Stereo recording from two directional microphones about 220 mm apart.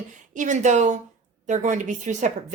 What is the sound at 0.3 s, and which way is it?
A woman's voice, 35° right (ahead or behind).